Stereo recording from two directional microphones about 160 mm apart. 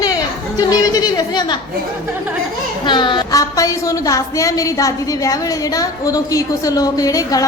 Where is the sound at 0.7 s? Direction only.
25° left (ahead or behind).